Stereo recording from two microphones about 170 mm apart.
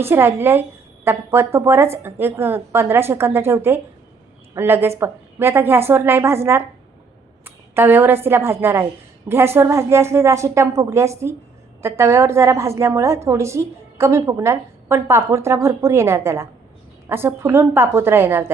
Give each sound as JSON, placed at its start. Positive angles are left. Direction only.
{"t": 0.0, "sound": "a woman's voice", "side_deg": -15}